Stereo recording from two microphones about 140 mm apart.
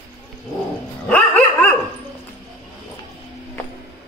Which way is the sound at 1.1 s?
10° left (ahead or behind).